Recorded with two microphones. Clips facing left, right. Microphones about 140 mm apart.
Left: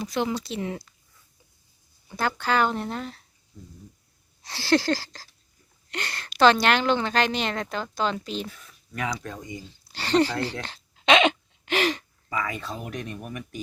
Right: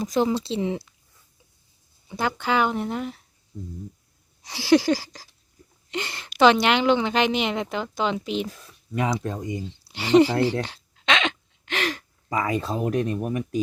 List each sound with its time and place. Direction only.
0.0 s speech: 40° right (ahead or behind)
0.3 s speech: 30° right (ahead or behind)
2.0 s speech: 15° right (ahead or behind)
4.4 s speech: 15° right (ahead or behind)
8.4 s speech: 35° right (ahead or behind); by 10.8 s 15° right (ahead or behind)
11.0 s a sound: 10° left (ahead or behind)
12.3 s speech: 35° right (ahead or behind)